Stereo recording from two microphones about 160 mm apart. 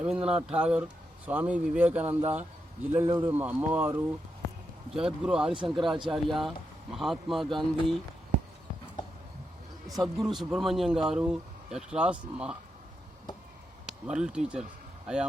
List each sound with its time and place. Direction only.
0.0 s speech: 5° right (ahead or behind)
5.5 s speech: 30° right (ahead or behind)
6.1 s speech: centre (ahead or behind)
9.8 s speech: centre (ahead or behind)
13.8 s speech: 5° right (ahead or behind)